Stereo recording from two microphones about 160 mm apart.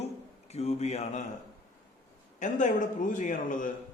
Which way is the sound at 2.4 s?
50° left (ahead or behind).